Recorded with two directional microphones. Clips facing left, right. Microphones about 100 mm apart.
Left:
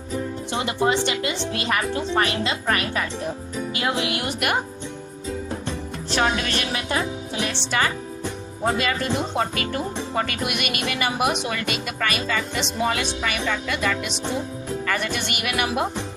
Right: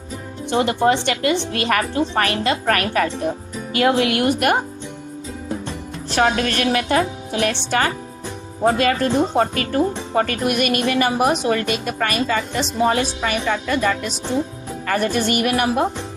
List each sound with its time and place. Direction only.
0.6 s speech: 50° right (ahead or behind)
6.1 s speech: 45° right (ahead or behind)